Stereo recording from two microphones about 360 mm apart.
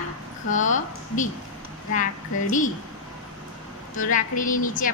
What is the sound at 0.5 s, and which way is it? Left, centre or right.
Speech, left.